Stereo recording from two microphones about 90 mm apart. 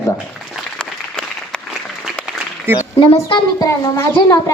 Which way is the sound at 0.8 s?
10° left (ahead or behind).